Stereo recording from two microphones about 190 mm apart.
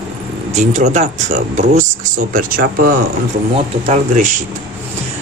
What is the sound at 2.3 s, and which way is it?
Speech, 50° right (ahead or behind).